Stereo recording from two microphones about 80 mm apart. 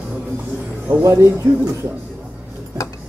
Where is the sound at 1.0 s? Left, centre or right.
Right.